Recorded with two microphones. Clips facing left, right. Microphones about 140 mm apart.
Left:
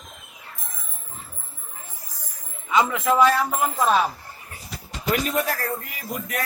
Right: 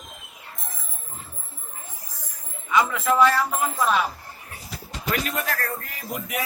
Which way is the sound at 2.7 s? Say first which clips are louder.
Left 1 dB; 20° left (ahead or behind).